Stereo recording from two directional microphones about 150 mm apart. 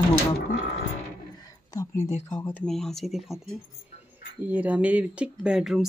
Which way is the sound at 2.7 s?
Centre (ahead or behind).